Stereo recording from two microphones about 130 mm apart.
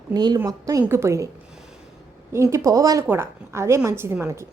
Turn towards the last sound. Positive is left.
turn(degrees=-20)  # may be behind; listen again after turning